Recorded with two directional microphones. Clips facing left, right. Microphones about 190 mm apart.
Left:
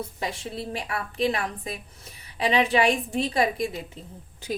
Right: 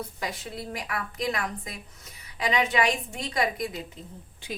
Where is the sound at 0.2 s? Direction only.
30° left (ahead or behind).